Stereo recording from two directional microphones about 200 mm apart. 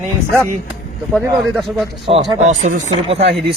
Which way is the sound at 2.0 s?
30° right (ahead or behind).